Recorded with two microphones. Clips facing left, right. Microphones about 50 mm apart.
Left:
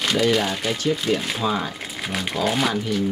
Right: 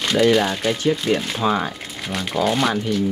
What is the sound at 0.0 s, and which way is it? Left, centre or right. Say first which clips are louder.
Speech: right 3 dB; centre.